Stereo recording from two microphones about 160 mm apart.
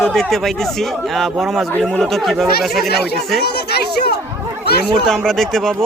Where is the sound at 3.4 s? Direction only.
85° left.